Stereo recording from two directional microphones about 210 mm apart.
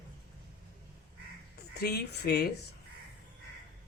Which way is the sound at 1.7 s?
50° left (ahead or behind).